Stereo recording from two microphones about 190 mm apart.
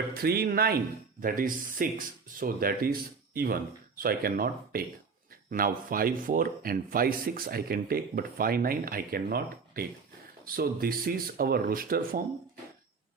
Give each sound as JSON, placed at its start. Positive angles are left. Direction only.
{"t": 0.2, "sound": "speech", "side_deg": -55}